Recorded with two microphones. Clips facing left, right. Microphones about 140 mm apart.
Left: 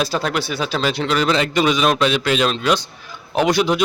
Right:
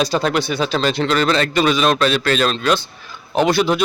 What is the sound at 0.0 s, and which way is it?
A man's voice, 5° left (ahead or behind).